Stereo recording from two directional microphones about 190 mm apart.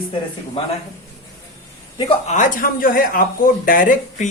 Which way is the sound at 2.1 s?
40° left (ahead or behind).